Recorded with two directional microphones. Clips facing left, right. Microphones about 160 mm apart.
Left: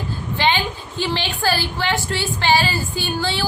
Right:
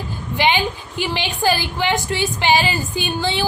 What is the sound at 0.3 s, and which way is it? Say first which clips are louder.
A woman's voice: right 2 dB; 15° right (ahead or behind).